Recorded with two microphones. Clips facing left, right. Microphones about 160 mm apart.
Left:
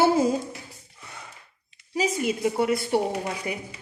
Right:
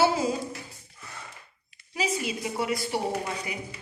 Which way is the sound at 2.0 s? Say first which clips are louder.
Left 5 dB; 55° left (ahead or behind).